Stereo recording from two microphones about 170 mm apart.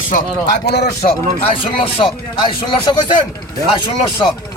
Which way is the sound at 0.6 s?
75° left (ahead or behind).